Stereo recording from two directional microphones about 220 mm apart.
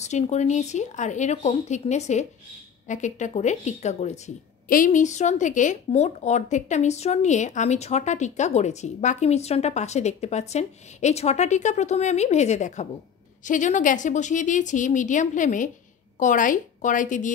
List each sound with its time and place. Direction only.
0.0 s a woman's voice: 30° left (ahead or behind)